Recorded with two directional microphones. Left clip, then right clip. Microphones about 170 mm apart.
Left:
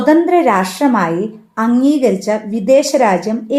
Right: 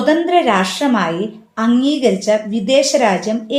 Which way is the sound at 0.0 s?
45° left (ahead or behind).